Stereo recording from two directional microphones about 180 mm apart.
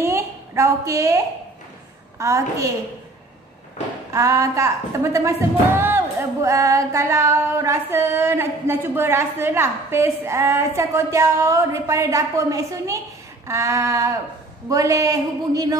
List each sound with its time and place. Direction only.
0.0 s a sound: 15° right (ahead or behind)
2.1 s female singing: 15° right (ahead or behind)
4.1 s female singing: 15° right (ahead or behind)
14.7 s speech: 20° right (ahead or behind)